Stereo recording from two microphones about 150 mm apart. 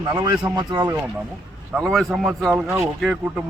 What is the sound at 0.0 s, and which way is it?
Speech, 25° right (ahead or behind).